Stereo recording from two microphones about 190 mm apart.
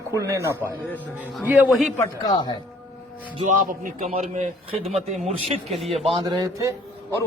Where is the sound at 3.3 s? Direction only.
40° right (ahead or behind).